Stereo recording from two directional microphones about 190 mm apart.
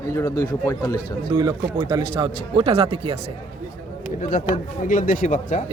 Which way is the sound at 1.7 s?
20° right (ahead or behind).